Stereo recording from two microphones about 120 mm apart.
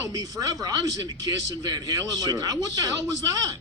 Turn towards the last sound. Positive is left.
turn(degrees=-30)  # may be behind; listen again after turning